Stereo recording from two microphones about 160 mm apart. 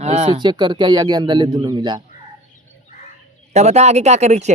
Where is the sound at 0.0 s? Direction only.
45° right (ahead or behind).